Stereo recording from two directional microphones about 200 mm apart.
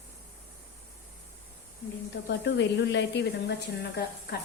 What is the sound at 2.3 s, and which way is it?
A woman's voice, 60° left (ahead or behind).